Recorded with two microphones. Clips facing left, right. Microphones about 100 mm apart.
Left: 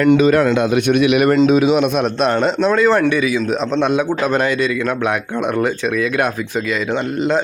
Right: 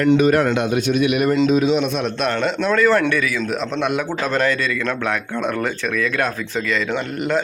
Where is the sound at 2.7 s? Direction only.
20° left (ahead or behind).